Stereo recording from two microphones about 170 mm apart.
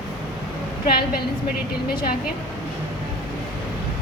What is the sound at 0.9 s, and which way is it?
Speech, 60° left (ahead or behind).